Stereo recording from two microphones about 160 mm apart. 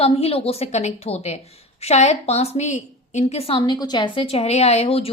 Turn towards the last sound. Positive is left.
turn(degrees=40)  # may be behind; listen again after turning